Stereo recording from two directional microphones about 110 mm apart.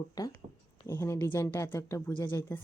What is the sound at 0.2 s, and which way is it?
A woman's voice, 35° left (ahead or behind).